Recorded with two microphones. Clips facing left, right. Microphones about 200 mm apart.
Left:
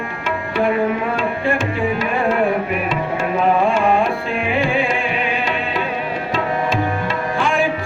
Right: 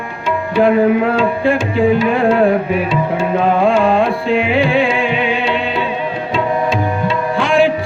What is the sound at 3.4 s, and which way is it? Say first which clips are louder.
Music: right 3 dB; 85° right.